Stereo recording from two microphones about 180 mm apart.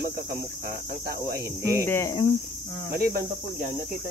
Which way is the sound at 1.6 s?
15° right (ahead or behind).